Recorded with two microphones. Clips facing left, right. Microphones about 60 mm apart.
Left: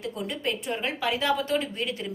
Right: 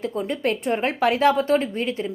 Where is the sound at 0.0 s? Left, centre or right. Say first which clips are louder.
Right 6 dB; right.